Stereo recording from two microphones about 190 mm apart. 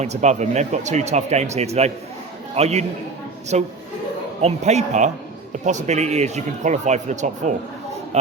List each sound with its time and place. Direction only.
0.0 s speech: 35° right (ahead or behind)